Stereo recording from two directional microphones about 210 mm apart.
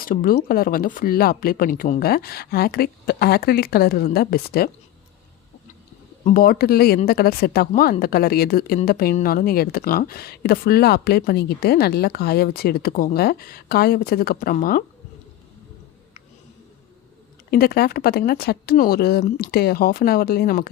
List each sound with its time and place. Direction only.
0.0 s speech: 40° left (ahead or behind)
6.2 s speech: 45° left (ahead or behind)
17.5 s speech: 45° left (ahead or behind)